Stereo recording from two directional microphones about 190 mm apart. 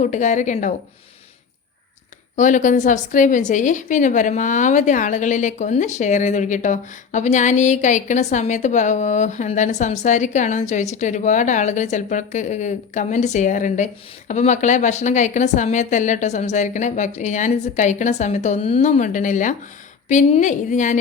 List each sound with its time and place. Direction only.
0.0 s a woman's voice: 40° left (ahead or behind)
2.3 s a woman's voice: 40° left (ahead or behind)